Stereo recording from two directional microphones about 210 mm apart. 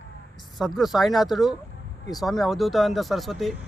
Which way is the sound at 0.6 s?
Centre (ahead or behind).